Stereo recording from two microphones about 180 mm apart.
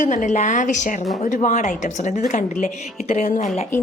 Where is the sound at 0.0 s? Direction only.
45° left (ahead or behind).